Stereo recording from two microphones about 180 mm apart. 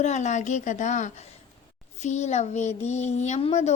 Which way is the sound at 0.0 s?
40° left (ahead or behind).